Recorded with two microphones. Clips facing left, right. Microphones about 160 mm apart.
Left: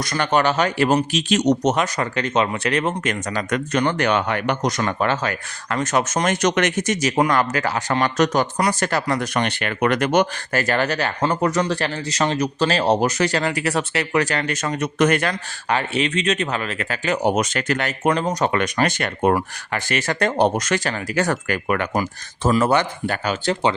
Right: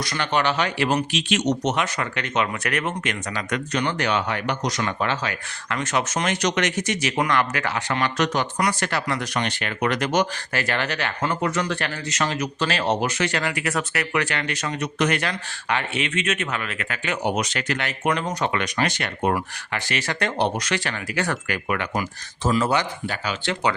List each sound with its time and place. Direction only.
0.0 s speech: 45° left (ahead or behind)